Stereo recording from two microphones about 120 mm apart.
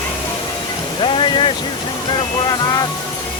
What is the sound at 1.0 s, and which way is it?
Speech, 45° left (ahead or behind).